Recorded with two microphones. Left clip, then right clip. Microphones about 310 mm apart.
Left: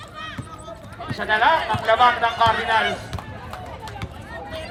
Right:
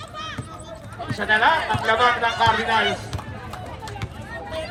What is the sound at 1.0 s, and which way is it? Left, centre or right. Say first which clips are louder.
Speech: even; left.